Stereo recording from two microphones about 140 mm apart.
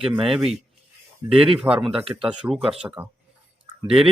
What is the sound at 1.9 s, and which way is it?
Speech, 40° right (ahead or behind).